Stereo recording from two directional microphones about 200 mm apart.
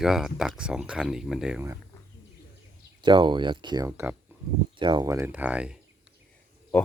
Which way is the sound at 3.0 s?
25° right (ahead or behind).